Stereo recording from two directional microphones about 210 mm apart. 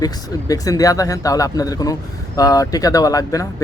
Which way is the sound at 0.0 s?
15° left (ahead or behind).